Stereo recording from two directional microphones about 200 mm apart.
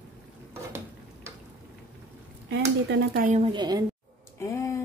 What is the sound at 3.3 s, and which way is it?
Speech, 25° right (ahead or behind).